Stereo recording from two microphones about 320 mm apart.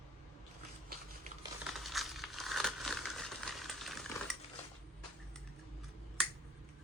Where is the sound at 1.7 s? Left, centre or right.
Centre.